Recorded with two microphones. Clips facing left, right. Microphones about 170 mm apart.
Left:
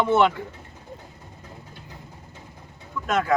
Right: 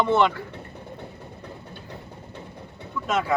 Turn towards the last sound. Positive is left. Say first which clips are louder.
# left 2 dB
turn(degrees=0)  # may be behind; listen again after turning